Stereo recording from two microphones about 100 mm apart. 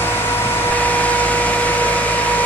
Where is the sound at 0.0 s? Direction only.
20° left (ahead or behind).